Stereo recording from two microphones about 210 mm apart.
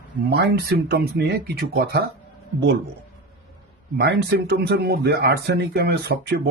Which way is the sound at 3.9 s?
50° right (ahead or behind).